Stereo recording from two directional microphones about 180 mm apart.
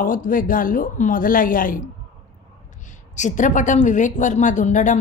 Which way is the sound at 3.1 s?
45° left (ahead or behind).